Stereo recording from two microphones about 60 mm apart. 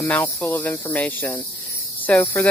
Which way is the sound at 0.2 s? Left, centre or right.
Left.